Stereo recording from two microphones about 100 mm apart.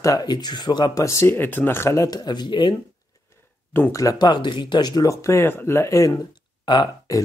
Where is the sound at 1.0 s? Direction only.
30° left (ahead or behind); by 2.8 s 50° left (ahead or behind).